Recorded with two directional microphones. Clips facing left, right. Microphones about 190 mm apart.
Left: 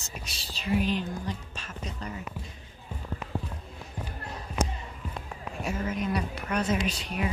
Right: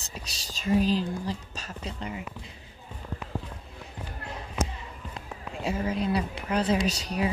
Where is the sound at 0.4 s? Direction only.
40° right (ahead or behind); by 2.2 s 25° right (ahead or behind).